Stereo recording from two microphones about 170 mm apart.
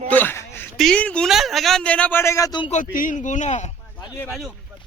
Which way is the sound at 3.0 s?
50° left (ahead or behind).